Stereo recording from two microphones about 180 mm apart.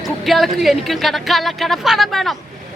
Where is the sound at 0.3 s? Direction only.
Centre (ahead or behind).